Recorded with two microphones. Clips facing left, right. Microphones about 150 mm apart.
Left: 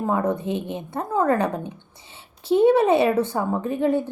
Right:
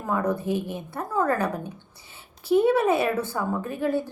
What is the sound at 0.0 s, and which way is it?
Speech, 25° left (ahead or behind).